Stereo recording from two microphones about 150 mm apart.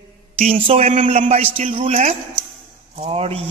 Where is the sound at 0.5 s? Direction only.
40° right (ahead or behind).